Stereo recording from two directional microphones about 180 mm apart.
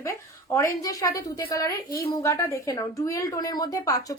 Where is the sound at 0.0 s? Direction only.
20° left (ahead or behind).